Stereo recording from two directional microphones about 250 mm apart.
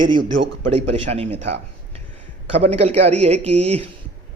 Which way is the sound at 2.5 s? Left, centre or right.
Right.